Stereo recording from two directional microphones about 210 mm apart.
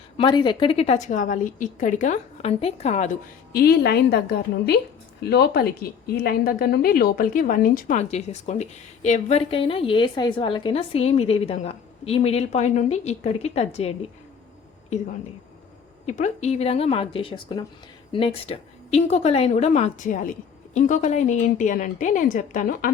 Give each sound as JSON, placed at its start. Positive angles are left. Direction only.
{"t": 0.2, "sound": "a woman's voice", "side_deg": 20}
{"t": 3.5, "sound": "a woman's voice", "side_deg": 50}
{"t": 16.0, "sound": "a woman's voice", "side_deg": 35}